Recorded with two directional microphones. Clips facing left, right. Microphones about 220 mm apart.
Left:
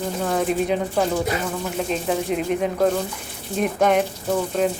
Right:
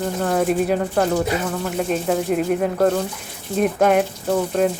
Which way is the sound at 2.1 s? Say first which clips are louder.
Right 3 dB; 5° right (ahead or behind).